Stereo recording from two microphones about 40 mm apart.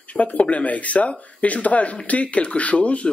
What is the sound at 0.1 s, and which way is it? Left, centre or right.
Speech, left.